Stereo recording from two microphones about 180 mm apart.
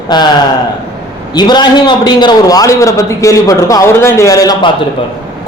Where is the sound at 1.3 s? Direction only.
25° left (ahead or behind).